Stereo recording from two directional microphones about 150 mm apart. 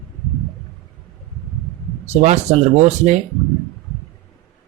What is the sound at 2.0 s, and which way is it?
Speech, 50° right (ahead or behind).